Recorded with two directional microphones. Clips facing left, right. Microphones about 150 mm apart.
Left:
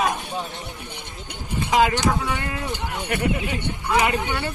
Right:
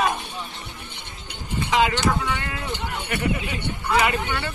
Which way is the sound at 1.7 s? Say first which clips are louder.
Left 2 dB; 40° left (ahead or behind).